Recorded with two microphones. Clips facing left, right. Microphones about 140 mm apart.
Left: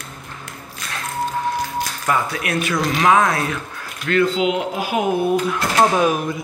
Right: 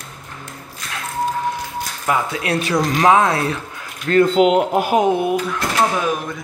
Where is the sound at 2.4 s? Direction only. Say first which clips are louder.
Right 2 dB; 30° right (ahead or behind).